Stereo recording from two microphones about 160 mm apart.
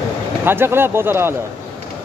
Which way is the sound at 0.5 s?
15° right (ahead or behind).